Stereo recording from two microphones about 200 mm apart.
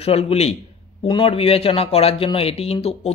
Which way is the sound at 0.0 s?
30° left (ahead or behind).